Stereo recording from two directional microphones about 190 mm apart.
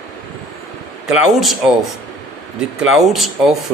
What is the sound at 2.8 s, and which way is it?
Speech, centre (ahead or behind).